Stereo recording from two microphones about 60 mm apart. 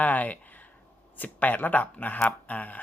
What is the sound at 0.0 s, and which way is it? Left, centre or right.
Speech, left.